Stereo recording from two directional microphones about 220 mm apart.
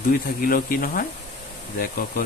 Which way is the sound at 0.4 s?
40° left (ahead or behind).